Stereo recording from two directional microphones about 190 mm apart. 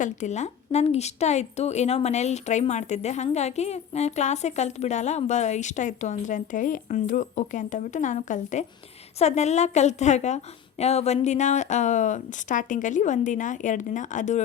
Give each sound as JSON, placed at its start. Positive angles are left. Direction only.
{"t": 0.0, "sound": "a woman's voice", "side_deg": 40}